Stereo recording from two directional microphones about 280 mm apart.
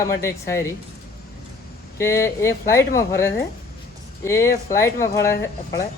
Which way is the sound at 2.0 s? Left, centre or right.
Centre.